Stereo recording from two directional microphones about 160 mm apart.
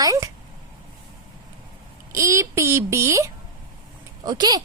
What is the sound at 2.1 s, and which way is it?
A child's voice, 20° right (ahead or behind).